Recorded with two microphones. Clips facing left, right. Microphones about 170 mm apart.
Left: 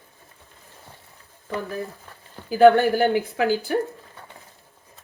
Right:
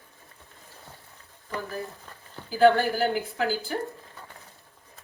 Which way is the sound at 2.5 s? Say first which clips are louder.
Left 5 dB; 60° left (ahead or behind).